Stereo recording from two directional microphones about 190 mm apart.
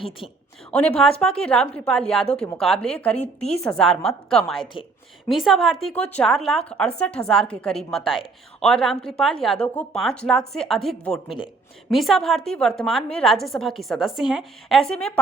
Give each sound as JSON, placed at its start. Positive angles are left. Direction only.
{"t": 0.7, "sound": "a woman's voice", "side_deg": 5}
{"t": 3.2, "sound": "a woman's voice", "side_deg": 35}
{"t": 3.6, "sound": "a woman's voice", "side_deg": 5}